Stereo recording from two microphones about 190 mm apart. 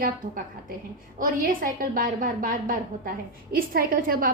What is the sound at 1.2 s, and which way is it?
A woman's voice, 45° right (ahead or behind).